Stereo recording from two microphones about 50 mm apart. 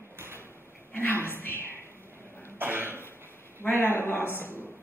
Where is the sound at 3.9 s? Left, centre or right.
Left.